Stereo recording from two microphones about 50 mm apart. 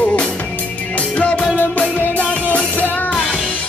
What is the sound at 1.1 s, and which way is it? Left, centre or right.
Music, left.